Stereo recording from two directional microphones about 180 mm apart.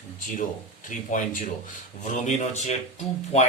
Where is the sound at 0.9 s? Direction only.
45° left (ahead or behind).